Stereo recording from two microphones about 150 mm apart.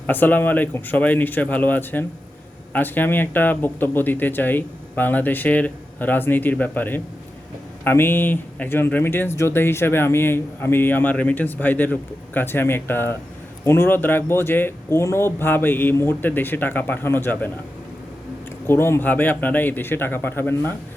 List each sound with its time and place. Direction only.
0.1 s speech: 10° left (ahead or behind)
18.7 s speech: 15° left (ahead or behind)